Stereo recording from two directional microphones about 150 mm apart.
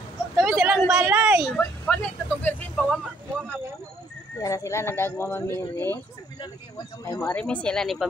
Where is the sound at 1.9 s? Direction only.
5° left (ahead or behind).